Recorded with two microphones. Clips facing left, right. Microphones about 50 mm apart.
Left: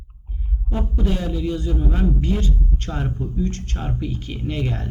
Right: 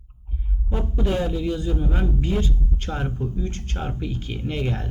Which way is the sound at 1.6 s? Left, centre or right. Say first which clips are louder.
Left 2 dB; centre.